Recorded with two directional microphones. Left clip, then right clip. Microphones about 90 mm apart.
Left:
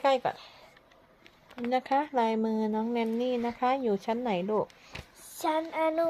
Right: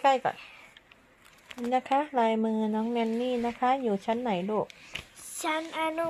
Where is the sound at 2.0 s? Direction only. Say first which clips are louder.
Right 1 dB; 10° right (ahead or behind).